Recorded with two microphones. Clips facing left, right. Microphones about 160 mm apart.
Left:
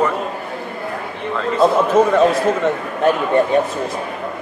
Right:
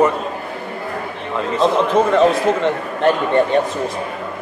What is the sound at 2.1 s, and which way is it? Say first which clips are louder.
A man's voice: even; 5° left (ahead or behind).